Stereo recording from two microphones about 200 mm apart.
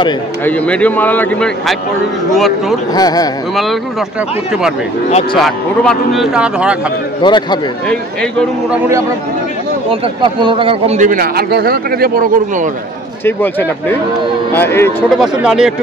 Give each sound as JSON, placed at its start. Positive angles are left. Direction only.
{"t": 0.5, "sound": "a man's voice", "side_deg": 5}
{"t": 2.9, "sound": "speech", "side_deg": 20}
{"t": 5.4, "sound": "a man's voice", "side_deg": 0}
{"t": 7.2, "sound": "speech", "side_deg": 20}
{"t": 7.9, "sound": "a man's voice", "side_deg": 5}
{"t": 8.6, "sound": "a man's voice", "side_deg": -10}
{"t": 9.8, "sound": "speech", "side_deg": -25}
{"t": 11.0, "sound": "speech", "side_deg": -45}
{"t": 13.2, "sound": "a man's voice", "side_deg": 10}
{"t": 15.1, "sound": "a man's voice", "side_deg": -5}